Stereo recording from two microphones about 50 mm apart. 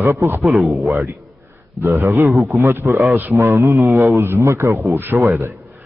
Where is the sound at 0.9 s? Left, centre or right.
Right.